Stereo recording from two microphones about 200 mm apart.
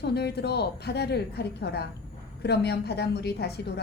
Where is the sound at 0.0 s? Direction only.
55° left (ahead or behind).